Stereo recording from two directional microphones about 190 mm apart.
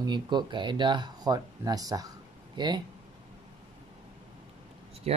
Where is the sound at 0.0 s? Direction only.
25° right (ahead or behind).